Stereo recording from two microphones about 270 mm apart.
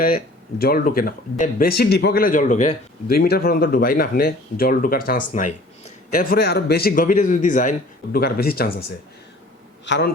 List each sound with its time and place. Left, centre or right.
0.6 s speech: left
9.8 s a man's voice: left